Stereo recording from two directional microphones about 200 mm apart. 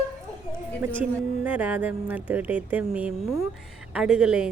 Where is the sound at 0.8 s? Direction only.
10° right (ahead or behind).